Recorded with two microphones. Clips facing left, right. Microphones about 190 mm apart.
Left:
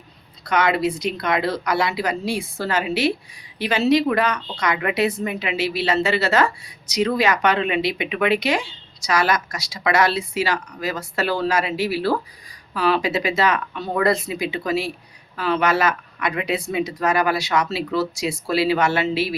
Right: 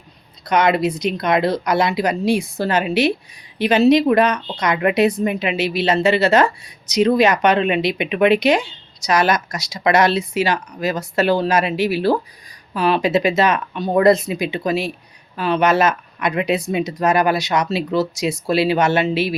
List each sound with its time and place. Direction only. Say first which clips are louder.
0.4 s a woman's voice: right 3 dB; 20° right (ahead or behind)